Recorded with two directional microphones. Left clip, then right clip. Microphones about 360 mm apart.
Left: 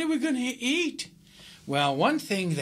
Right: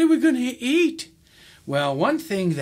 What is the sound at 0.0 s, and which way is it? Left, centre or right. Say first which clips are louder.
Speech: right 9 dB; right.